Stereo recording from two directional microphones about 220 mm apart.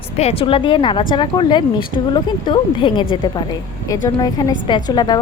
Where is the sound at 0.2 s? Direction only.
25° left (ahead or behind).